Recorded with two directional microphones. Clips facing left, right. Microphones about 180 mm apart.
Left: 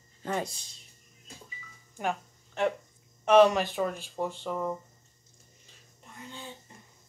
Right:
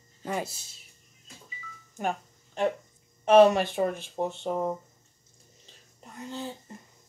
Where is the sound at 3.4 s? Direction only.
20° right (ahead or behind).